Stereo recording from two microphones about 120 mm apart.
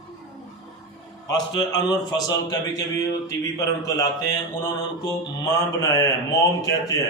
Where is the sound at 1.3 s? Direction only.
35° left (ahead or behind).